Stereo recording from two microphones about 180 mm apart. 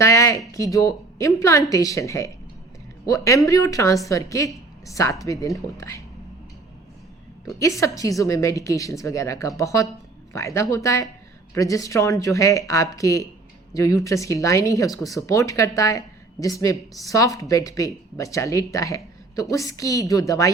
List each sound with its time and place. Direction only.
0.0 s a sound: 15° left (ahead or behind)
0.5 s speech: 20° left (ahead or behind)
7.6 s speech: 15° left (ahead or behind)